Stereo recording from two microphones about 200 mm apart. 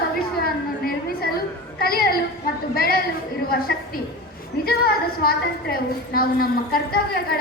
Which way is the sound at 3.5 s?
50° left (ahead or behind).